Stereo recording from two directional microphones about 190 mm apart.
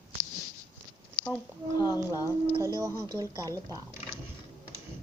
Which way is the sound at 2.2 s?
15° right (ahead or behind).